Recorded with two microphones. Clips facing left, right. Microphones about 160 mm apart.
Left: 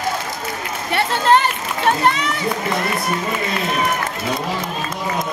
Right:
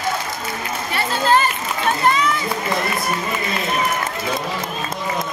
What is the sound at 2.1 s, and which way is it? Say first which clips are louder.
Run: right 1 dB; 70° left (ahead or behind).